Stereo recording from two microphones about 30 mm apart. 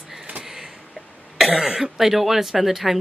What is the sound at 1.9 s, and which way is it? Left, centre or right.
Speech, centre.